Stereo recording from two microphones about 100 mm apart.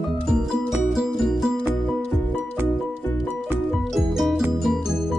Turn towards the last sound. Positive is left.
turn(degrees=0)  # may be behind; listen again after turning